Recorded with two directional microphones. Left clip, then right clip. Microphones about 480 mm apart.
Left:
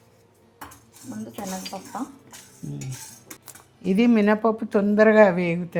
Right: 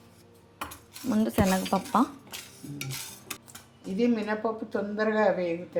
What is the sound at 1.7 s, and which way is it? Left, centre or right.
Speech, right.